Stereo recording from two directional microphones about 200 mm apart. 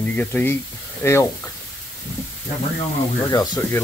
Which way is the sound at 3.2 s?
15° left (ahead or behind).